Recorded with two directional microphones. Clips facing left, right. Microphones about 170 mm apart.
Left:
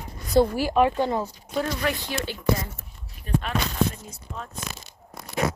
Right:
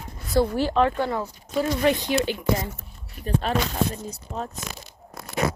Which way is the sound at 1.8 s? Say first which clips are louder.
Right 6 dB; 20° right (ahead or behind).